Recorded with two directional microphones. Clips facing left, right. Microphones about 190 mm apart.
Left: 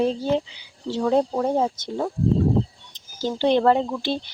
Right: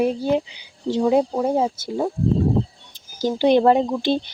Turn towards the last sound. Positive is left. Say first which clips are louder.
# right 5 dB
turn(degrees=-20)  # may be behind; listen again after turning